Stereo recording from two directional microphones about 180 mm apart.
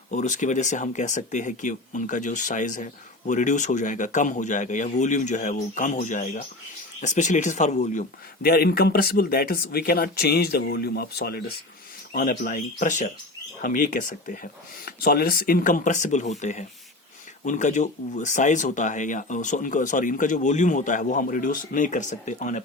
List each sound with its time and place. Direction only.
0.1 s speech: 45° left (ahead or behind)
8.4 s speech: 60° left (ahead or behind)
12.1 s speech: 50° left (ahead or behind)